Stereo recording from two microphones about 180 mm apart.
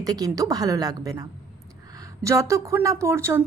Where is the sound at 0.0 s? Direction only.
20° right (ahead or behind).